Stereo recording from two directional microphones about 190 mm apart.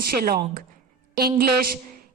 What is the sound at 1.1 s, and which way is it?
Speech, 55° right (ahead or behind).